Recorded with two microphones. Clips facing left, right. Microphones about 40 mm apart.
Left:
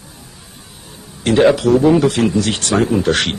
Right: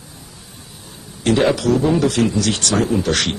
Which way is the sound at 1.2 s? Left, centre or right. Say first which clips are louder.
Left 4 dB; centre.